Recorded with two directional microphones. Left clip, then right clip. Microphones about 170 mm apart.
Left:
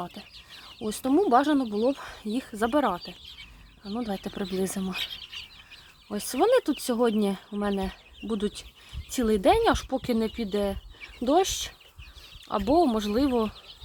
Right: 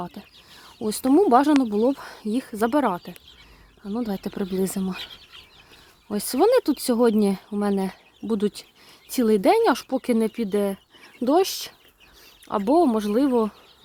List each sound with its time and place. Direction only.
0.0 s speech: 25° right (ahead or behind)
0.8 s speech: 35° right (ahead or behind)
6.1 s speech: 30° right (ahead or behind)